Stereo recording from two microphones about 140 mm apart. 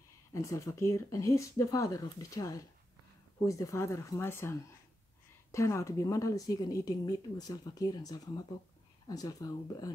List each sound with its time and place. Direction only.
0.3 s a woman's voice: 20° left (ahead or behind)